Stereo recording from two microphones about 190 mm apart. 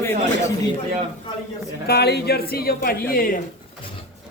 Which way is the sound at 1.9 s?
60° left (ahead or behind).